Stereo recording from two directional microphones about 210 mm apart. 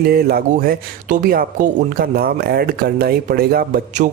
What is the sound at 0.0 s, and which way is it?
Speech, 45° right (ahead or behind).